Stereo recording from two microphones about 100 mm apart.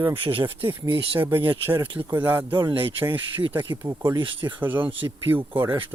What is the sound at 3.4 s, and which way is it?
Speech, 55° right (ahead or behind).